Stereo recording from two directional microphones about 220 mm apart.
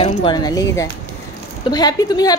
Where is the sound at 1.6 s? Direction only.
20° left (ahead or behind).